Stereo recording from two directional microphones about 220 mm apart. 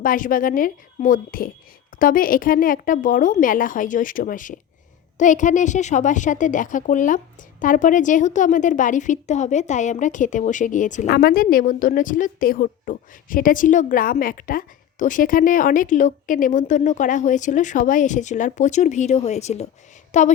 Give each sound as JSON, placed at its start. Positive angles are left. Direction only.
{"t": 0.0, "sound": "a woman's voice", "side_deg": 40}